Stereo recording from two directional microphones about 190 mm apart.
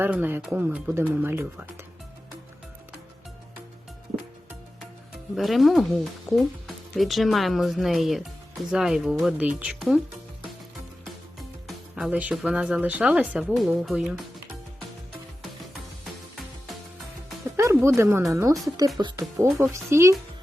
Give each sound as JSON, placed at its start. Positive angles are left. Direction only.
{"t": 0.0, "sound": "speech", "side_deg": -10}
{"t": 5.4, "sound": "speech", "side_deg": 0}
{"t": 11.9, "sound": "speech", "side_deg": -5}
{"t": 17.6, "sound": "music", "side_deg": -15}
{"t": 18.3, "sound": "speech", "side_deg": -15}
{"t": 19.5, "sound": "speech", "side_deg": -10}